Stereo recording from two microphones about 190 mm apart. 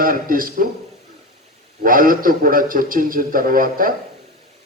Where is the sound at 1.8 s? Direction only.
50° right (ahead or behind).